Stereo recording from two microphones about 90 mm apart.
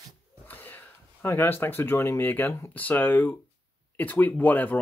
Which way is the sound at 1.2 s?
25° left (ahead or behind).